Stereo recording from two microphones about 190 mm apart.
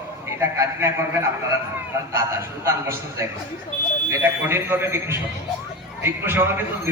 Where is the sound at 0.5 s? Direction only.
15° right (ahead or behind).